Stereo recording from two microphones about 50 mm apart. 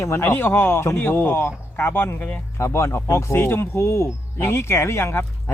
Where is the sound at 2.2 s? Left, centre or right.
Left.